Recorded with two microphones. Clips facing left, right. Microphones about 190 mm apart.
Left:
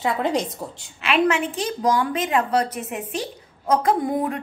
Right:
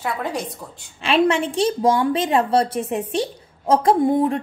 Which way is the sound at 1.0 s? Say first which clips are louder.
Right 2 dB; 30° right (ahead or behind).